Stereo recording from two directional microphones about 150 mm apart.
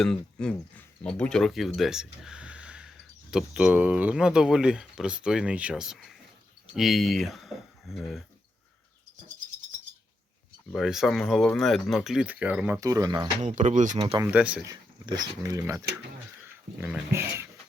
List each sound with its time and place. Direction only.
0.0 s speech: 5° left (ahead or behind)
10.7 s speech: centre (ahead or behind); by 13.2 s 25° right (ahead or behind)
13.4 s speech: 50° right (ahead or behind)
14.3 s speech: 10° right (ahead or behind)
14.6 s speech: 25° right (ahead or behind)